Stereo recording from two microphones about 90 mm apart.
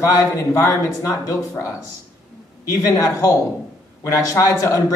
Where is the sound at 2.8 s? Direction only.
35° left (ahead or behind).